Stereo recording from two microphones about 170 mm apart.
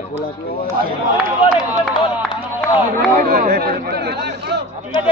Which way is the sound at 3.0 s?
65° right (ahead or behind).